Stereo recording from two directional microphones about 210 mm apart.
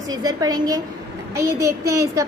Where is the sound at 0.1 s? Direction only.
20° right (ahead or behind).